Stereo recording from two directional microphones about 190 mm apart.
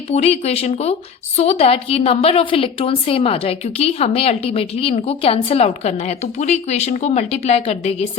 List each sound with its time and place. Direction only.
0.1 s a woman's voice: 35° left (ahead or behind)